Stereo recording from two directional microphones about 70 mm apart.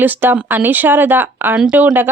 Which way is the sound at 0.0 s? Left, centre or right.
Right.